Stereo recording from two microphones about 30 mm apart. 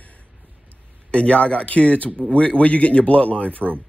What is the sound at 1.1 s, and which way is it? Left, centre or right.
Speech, left.